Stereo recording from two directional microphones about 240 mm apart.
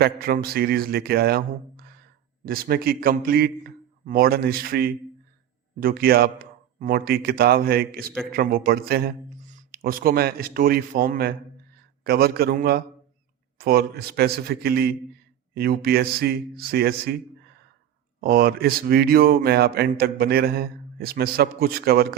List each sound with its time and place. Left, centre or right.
0.0 s speech: right
18.2 s speech: right